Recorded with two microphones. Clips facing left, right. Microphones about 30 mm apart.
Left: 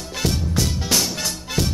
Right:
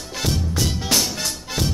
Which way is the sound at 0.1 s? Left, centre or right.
Centre.